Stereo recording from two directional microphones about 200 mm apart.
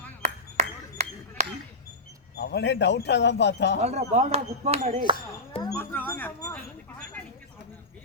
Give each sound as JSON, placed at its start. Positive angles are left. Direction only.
{"t": 0.2, "sound": "ping", "side_deg": -35}
{"t": 2.3, "sound": "speech", "side_deg": 55}
{"t": 3.8, "sound": "speech", "side_deg": -35}
{"t": 5.1, "sound": "speech", "side_deg": 25}
{"t": 5.7, "sound": "a sound", "side_deg": 10}